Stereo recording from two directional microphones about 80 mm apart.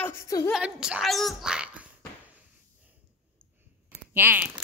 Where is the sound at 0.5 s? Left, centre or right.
Centre.